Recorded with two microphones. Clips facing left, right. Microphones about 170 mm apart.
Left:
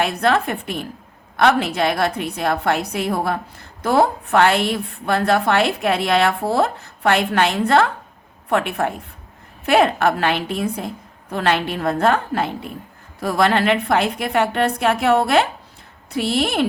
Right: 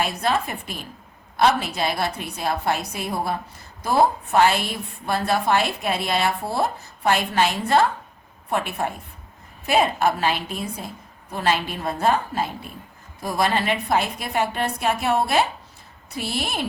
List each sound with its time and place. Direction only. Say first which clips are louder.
0.0 s a woman's voice: left 5 dB; 60° left (ahead or behind)